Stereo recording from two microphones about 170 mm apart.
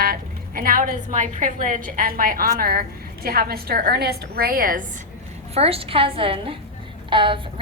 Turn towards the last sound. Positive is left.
turn(degrees=-30)  # may be behind; listen again after turning